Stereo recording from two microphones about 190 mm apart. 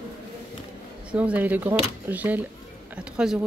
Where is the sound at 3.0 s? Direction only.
5° right (ahead or behind).